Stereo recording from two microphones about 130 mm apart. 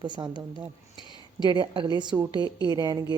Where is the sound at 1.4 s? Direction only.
40° right (ahead or behind).